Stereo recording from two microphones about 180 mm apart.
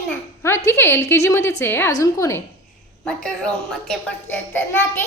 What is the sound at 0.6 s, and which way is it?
A child's voice, 15° left (ahead or behind).